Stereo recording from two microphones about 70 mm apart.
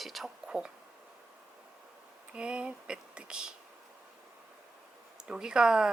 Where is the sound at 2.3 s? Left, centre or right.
Centre.